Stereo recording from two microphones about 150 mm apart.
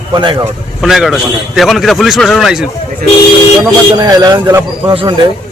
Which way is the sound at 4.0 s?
25° right (ahead or behind).